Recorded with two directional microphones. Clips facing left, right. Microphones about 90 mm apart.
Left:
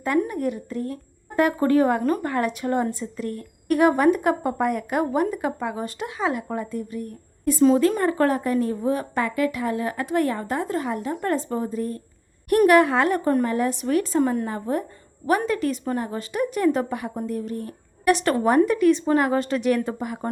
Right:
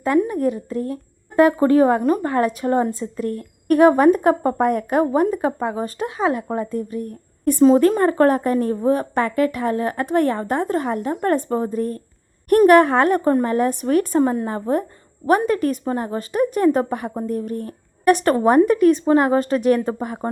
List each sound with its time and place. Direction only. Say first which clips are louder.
0.0 s speech: right 5 dB; 25° right (ahead or behind)
2.2 s a woman's voice: right 5 dB; 30° right (ahead or behind)
14.2 s a woman's voice: right 3 dB; 30° right (ahead or behind)
15.8 s a woman's voice: right 3 dB; 30° right (ahead or behind)
19.0 s a woman's voice: right 4 dB; 30° right (ahead or behind)